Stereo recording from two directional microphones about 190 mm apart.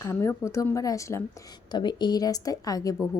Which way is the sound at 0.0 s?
15° left (ahead or behind).